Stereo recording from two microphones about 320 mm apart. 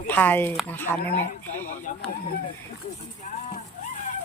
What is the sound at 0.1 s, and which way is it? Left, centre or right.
Speech, centre.